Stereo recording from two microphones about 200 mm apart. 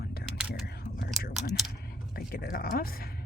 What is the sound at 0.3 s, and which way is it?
Whispering, 5° right (ahead or behind).